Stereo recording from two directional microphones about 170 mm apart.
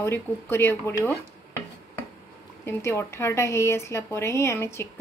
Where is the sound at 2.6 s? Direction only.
15° left (ahead or behind).